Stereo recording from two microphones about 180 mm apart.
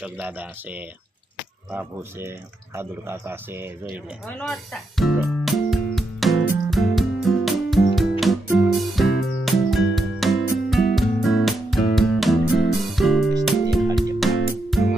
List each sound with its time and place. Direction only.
0.0 s speech: 10° right (ahead or behind)
4.3 s music: 5° left (ahead or behind)